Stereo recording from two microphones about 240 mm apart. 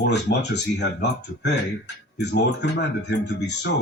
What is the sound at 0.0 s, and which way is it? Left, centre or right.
Speech, left.